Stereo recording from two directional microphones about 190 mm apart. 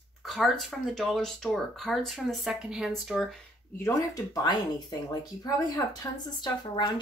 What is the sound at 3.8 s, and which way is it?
Speech, 15° left (ahead or behind).